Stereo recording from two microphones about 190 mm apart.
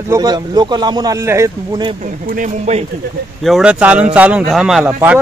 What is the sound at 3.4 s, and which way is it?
Speech, centre (ahead or behind).